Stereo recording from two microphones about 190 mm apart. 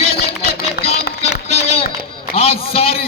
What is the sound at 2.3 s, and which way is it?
Speech, 30° left (ahead or behind).